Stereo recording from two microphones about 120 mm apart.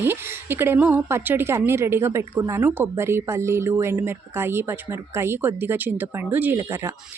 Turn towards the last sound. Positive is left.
turn(degrees=-20)  # may be behind; listen again after turning